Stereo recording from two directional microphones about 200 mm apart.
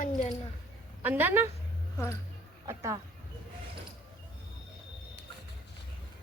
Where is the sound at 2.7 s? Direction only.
15° right (ahead or behind).